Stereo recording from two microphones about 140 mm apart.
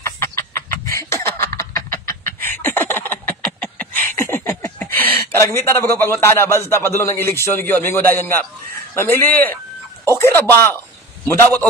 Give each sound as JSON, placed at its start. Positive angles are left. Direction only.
{"t": 0.0, "sound": "chicken", "side_deg": 20}
{"t": 4.2, "sound": "speech", "side_deg": 15}